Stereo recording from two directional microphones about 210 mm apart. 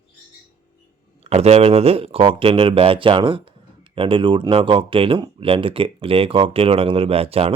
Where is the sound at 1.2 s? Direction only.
30° right (ahead or behind).